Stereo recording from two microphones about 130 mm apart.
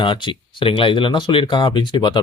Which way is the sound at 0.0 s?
40° left (ahead or behind).